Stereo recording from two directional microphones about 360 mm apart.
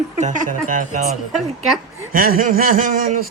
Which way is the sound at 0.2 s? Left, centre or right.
Right.